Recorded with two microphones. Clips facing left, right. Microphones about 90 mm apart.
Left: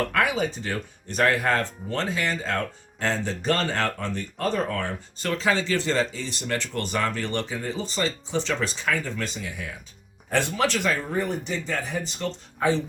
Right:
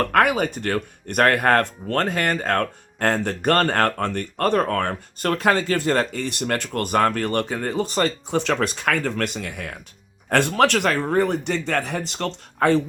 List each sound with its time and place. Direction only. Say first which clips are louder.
0.0 s speech: right 5 dB; 60° right (ahead or behind)